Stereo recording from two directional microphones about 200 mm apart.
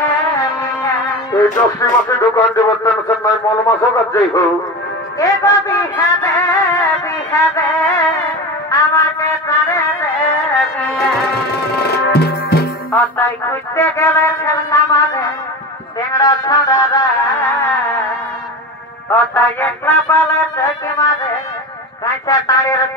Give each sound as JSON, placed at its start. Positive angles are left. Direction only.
{"t": 0.0, "sound": "music", "side_deg": 15}
{"t": 11.7, "sound": "music", "side_deg": 55}
{"t": 12.9, "sound": "a sound", "side_deg": 10}
{"t": 16.1, "sound": "music", "side_deg": 20}
{"t": 19.1, "sound": "a sound", "side_deg": 10}
{"t": 22.0, "sound": "a man's voice", "side_deg": 15}